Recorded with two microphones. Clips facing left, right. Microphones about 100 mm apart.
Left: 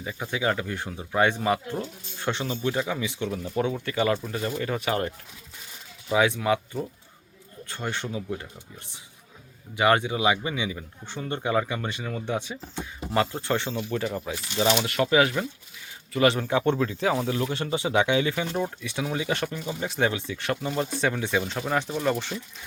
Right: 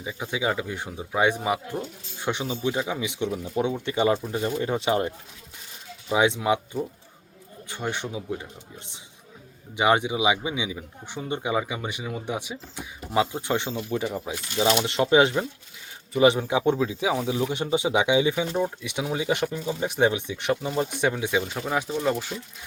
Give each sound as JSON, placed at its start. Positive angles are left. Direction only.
{"t": 0.0, "sound": "speech", "side_deg": -10}
{"t": 9.7, "sound": "speech", "side_deg": -15}